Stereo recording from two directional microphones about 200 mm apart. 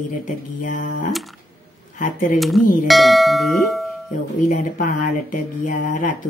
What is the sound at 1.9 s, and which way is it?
Speech, 40° left (ahead or behind).